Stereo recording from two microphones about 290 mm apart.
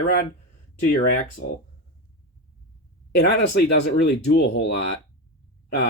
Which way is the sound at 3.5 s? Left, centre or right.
Left.